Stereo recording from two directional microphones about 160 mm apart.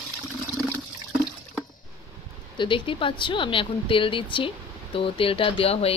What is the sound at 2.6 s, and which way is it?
Speech, 30° left (ahead or behind).